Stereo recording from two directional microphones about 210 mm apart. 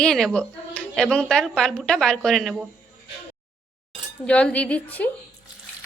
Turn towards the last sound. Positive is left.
turn(degrees=5)  # may be behind; listen again after turning